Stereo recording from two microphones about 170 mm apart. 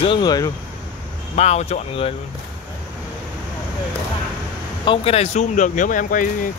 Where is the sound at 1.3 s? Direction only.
40° left (ahead or behind).